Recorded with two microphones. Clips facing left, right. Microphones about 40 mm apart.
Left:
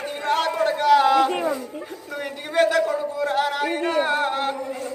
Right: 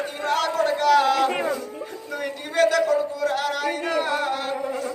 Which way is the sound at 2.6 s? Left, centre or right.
Centre.